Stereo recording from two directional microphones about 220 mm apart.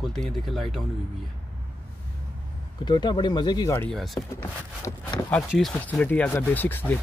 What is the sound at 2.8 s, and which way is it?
Speech, 20° left (ahead or behind).